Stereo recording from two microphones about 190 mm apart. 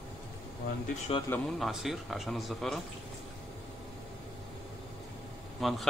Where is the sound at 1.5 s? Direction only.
Centre (ahead or behind).